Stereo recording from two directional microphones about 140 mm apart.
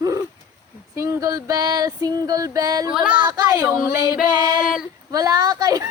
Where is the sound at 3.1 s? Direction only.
30° right (ahead or behind).